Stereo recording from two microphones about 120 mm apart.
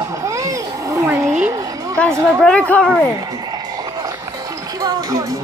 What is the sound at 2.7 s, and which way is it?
Speech, 10° left (ahead or behind).